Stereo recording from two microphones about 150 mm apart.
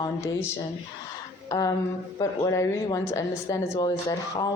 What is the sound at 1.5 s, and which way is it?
Speech, 25° left (ahead or behind).